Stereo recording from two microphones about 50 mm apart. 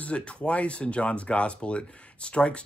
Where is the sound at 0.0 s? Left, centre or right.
Left.